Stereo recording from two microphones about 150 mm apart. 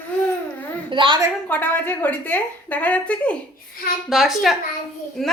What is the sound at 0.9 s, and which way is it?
Speech, 35° right (ahead or behind).